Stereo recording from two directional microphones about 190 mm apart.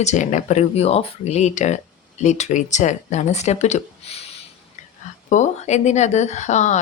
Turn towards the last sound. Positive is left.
turn(degrees=40)  # may be behind; listen again after turning